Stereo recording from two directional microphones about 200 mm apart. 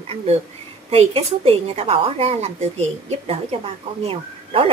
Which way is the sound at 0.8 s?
30° right (ahead or behind).